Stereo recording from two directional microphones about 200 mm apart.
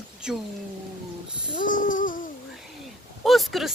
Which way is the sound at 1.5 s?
40° left (ahead or behind).